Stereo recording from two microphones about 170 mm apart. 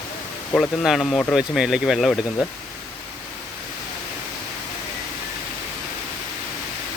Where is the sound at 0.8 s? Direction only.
Centre (ahead or behind).